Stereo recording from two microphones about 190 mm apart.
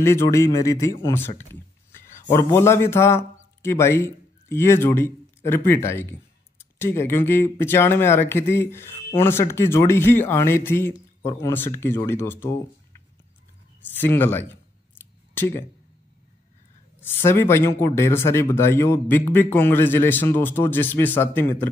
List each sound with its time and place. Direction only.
0.0 s speech: 15° left (ahead or behind)
13.9 s speech: 10° left (ahead or behind)
14.5 s scissors: 10° left (ahead or behind)
17.2 s speech: 10° left (ahead or behind)